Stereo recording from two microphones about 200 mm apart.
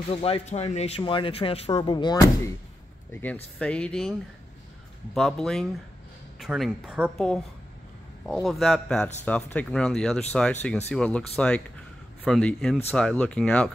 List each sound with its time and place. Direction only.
0.1 s speech: 30° left (ahead or behind)
1.7 s speech: 20° left (ahead or behind)
3.1 s speech: 10° left (ahead or behind)
5.1 s speech: centre (ahead or behind)